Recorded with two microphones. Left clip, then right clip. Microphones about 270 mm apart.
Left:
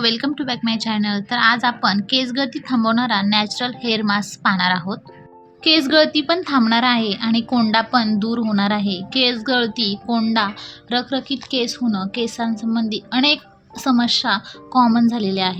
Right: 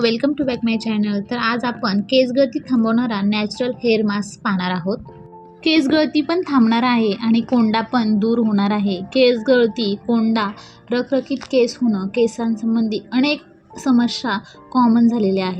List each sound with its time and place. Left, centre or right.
0.0 s a woman's voice: centre